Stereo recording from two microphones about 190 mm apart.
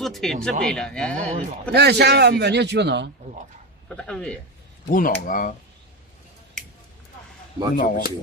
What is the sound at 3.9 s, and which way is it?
Speech, 5° left (ahead or behind).